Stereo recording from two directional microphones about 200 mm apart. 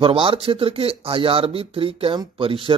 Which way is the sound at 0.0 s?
25° right (ahead or behind).